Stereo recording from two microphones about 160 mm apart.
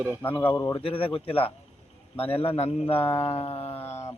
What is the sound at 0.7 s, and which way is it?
Speech, 35° left (ahead or behind).